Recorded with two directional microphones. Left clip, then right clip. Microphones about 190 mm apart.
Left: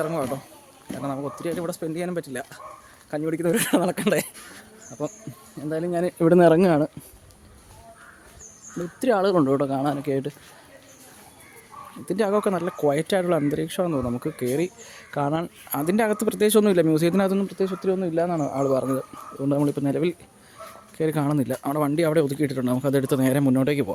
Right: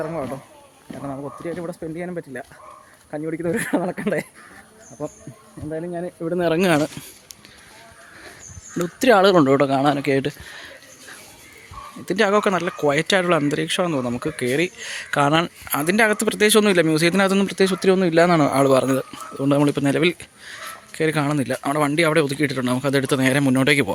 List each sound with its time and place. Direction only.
1.0 s speech: 10° left (ahead or behind)
5.6 s speech: 25° left (ahead or behind)
5.9 s speech: 60° left (ahead or behind)
6.7 s speech: 5° left (ahead or behind)
8.8 s a man's voice: 15° right (ahead or behind)
12.0 s speech: centre (ahead or behind)
15.7 s speech: 5° left (ahead or behind)
17.3 s a man's voice: 15° right (ahead or behind); by 23.9 s centre (ahead or behind)